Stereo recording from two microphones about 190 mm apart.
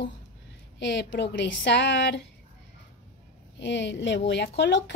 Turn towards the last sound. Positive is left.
turn(degrees=65)  # may be behind; listen again after turning